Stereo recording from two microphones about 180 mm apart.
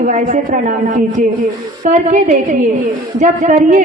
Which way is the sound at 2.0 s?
45° right (ahead or behind).